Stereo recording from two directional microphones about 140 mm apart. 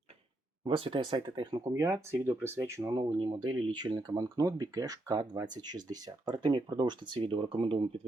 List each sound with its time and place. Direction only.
0.6 s speech: 40° right (ahead or behind); by 3.0 s 20° right (ahead or behind)
3.2 s speech: 30° right (ahead or behind)